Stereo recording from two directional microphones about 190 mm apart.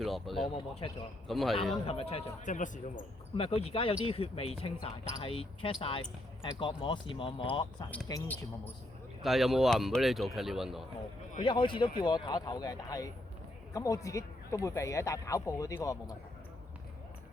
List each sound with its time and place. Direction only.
0.0 s speech: centre (ahead or behind)
0.4 s speech: 25° left (ahead or behind)
1.3 s speech: centre (ahead or behind)
1.7 s speech: 30° left (ahead or behind)
8.0 s speech: 15° left (ahead or behind)
9.2 s speech: centre (ahead or behind)
11.4 s speech: 25° left (ahead or behind)